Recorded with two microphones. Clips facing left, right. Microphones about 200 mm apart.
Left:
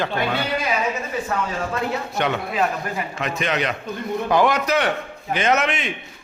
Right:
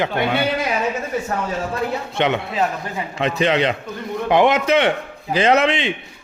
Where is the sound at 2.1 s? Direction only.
25° right (ahead or behind).